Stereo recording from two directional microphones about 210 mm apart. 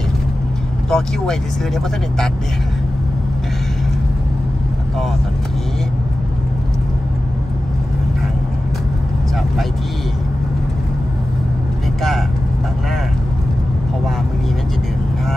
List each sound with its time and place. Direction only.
0.8 s speech: centre (ahead or behind)